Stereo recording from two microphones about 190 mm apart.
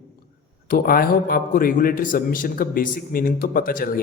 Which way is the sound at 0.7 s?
50° left (ahead or behind).